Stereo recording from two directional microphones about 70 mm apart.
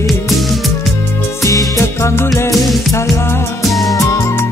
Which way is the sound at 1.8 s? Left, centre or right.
Left.